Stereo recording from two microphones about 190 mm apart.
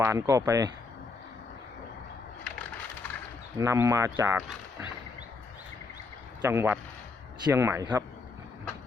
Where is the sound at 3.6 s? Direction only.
15° right (ahead or behind).